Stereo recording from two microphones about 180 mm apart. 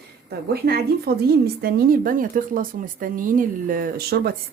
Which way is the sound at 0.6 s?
60° right (ahead or behind).